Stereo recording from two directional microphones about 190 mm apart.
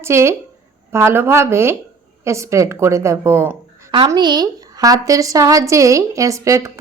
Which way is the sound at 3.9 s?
25° right (ahead or behind).